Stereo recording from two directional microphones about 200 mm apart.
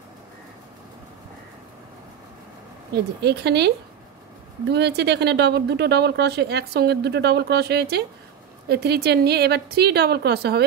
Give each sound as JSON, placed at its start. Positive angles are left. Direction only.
{"t": 2.9, "sound": "speech", "side_deg": -55}
{"t": 4.7, "sound": "a woman's voice", "side_deg": -55}